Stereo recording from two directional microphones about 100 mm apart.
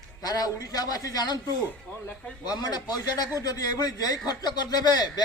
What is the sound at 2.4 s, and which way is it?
A man's voice, 45° left (ahead or behind).